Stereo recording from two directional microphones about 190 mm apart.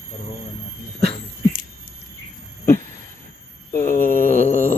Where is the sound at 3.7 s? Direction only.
50° left (ahead or behind).